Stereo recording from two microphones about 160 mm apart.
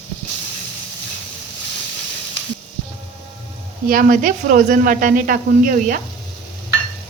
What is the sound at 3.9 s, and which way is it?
Speech, 60° right (ahead or behind).